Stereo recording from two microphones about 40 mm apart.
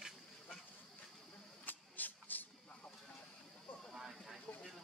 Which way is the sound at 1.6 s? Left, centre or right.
Left.